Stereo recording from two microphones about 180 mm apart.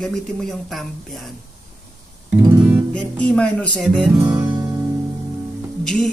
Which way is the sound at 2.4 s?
15° right (ahead or behind).